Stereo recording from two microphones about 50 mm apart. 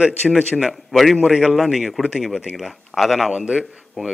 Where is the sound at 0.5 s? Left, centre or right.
Centre.